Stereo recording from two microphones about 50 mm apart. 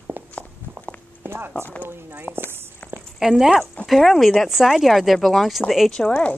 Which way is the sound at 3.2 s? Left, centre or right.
Centre.